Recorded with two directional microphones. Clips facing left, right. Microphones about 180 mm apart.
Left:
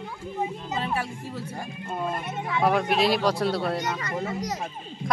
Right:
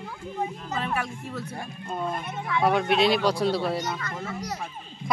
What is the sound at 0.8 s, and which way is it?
Music, 30° left (ahead or behind).